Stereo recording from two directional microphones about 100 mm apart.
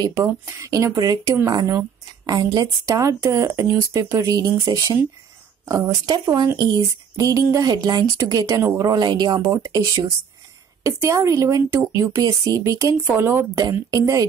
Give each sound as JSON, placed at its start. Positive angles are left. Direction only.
{"t": 0.1, "sound": "speech", "side_deg": -35}
{"t": 9.4, "sound": "speech", "side_deg": -35}
{"t": 12.9, "sound": "speech", "side_deg": -20}
{"t": 13.7, "sound": "speech", "side_deg": -35}